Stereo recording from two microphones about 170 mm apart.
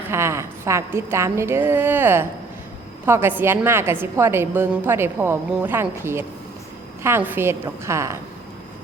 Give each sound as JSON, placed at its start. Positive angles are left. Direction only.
{"t": 0.0, "sound": "a woman's voice", "side_deg": -15}